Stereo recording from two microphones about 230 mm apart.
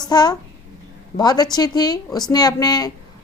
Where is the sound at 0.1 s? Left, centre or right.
Centre.